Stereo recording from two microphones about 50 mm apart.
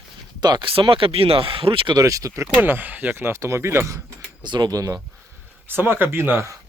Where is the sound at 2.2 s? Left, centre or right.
Right.